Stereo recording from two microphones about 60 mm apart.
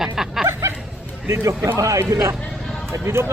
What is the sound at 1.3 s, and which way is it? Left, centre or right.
Speech, right.